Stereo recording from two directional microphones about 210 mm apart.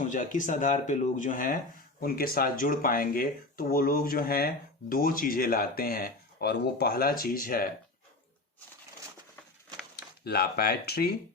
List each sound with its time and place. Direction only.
0.0 s speech: 35° left (ahead or behind)
9.9 s speech: 50° left (ahead or behind)